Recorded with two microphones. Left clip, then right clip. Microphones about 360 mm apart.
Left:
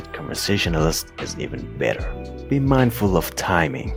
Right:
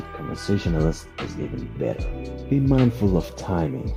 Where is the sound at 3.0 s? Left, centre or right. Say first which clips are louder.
Left 4 dB; left.